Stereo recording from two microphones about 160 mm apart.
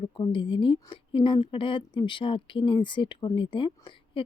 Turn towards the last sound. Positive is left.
turn(degrees=30)  # may be behind; listen again after turning